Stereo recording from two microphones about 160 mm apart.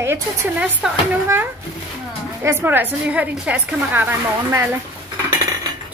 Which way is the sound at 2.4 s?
15° right (ahead or behind).